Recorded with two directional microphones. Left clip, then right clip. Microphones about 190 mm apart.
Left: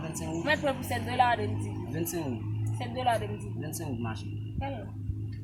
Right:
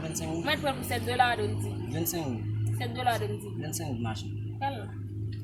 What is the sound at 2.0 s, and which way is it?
Speech, 15° right (ahead or behind).